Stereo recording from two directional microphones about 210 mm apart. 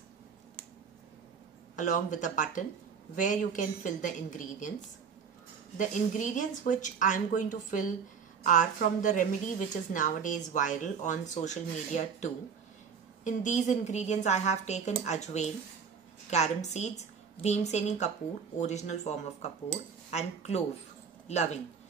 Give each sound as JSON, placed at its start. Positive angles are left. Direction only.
{"t": 1.8, "sound": "a woman's voice", "side_deg": 35}